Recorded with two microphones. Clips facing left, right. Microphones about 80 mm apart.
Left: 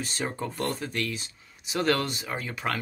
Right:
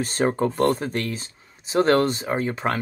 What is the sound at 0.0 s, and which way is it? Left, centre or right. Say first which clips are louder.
Speech: right 10 dB; right.